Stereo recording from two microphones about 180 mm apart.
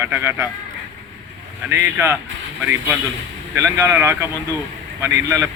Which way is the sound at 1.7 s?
15° right (ahead or behind).